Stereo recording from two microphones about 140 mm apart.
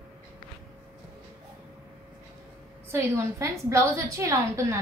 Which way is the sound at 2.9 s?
20° right (ahead or behind).